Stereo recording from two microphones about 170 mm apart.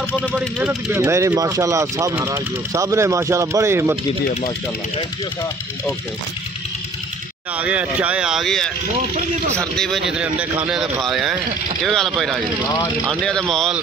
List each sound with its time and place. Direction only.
0.3 s speech: 10° right (ahead or behind)
7.5 s speech: 10° right (ahead or behind)